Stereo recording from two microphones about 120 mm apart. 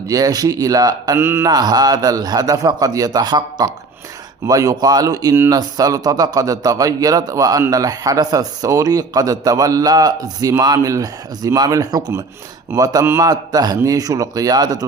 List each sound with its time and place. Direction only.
0.1 s a man's voice: 30° right (ahead or behind)
1.2 s mantra: 20° right (ahead or behind)
1.5 s a man's voice: 35° right (ahead or behind)